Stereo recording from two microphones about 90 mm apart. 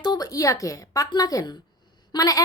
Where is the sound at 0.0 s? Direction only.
45° left (ahead or behind).